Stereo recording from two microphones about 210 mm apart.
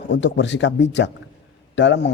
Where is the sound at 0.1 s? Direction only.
55° left (ahead or behind).